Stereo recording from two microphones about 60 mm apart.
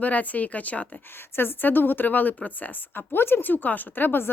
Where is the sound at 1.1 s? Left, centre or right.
Left.